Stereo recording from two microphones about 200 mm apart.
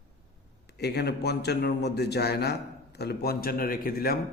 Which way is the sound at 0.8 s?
55° left (ahead or behind).